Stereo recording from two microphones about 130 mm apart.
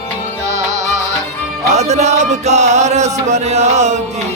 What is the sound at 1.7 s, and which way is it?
Chant, 60° right (ahead or behind).